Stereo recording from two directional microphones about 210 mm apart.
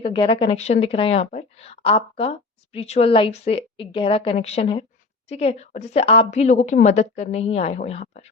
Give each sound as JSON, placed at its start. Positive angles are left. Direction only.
{"t": 0.0, "sound": "a woman's voice", "side_deg": 25}